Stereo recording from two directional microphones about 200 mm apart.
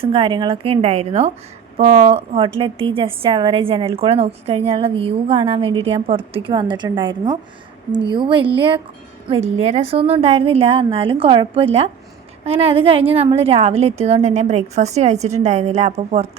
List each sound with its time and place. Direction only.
0.0 s a woman's voice: 25° right (ahead or behind)